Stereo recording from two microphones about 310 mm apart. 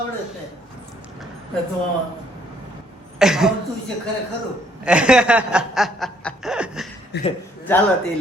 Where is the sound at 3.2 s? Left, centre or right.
Centre.